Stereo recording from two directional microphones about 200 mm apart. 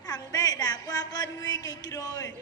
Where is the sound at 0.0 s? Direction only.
20° left (ahead or behind).